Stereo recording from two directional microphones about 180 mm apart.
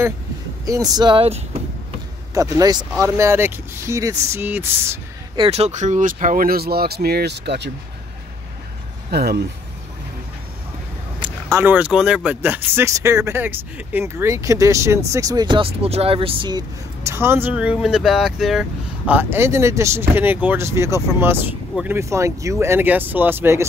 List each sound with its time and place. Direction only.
0.7 s speech: 20° right (ahead or behind)
2.3 s speech: 20° right (ahead or behind)
5.3 s speech: 30° right (ahead or behind); by 7.7 s 70° right (ahead or behind)
9.1 s speech: 60° right (ahead or behind)
11.1 s speech: 20° right (ahead or behind)